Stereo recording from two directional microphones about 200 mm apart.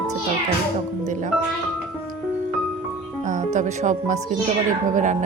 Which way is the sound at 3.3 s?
35° right (ahead or behind).